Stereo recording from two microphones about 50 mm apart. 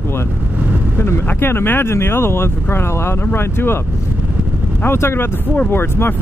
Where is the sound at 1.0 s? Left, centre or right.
Left.